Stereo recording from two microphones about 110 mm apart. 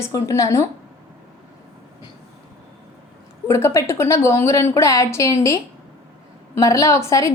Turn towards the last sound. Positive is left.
turn(degrees=25)  # may be behind; listen again after turning